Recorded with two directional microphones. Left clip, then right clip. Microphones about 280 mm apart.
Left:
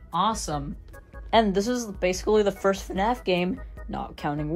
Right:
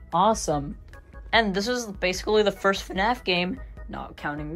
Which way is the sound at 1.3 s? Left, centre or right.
Centre.